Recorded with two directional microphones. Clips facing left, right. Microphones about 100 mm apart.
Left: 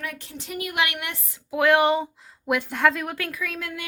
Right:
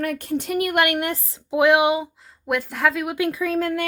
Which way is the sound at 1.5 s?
20° right (ahead or behind).